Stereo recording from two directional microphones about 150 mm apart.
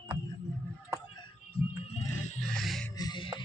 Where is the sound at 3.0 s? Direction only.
30° left (ahead or behind).